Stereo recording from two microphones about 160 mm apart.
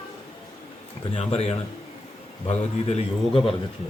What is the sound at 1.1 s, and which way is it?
A man's voice, 40° left (ahead or behind).